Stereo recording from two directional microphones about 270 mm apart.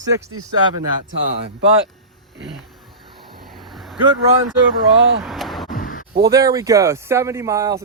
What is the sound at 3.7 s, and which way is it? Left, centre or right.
Vehicle, centre.